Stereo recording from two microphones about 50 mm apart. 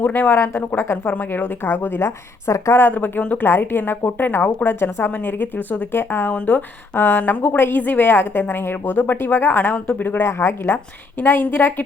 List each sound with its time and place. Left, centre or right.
0.2 s a woman's voice: left
1.0 s a woman's voice: left
2.7 s speech: left
3.4 s a woman's voice: left
5.1 s a woman's voice: left
6.3 s speech: left
6.9 s a woman's voice: left
7.2 s a woman's voice: left
10.2 s a woman's voice: left
11.2 s a woman's voice: left